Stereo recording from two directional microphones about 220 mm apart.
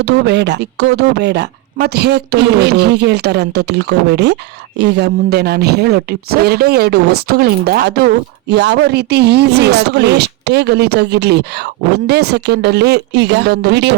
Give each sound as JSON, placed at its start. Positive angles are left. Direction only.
{"t": 0.0, "sound": "speech", "side_deg": -50}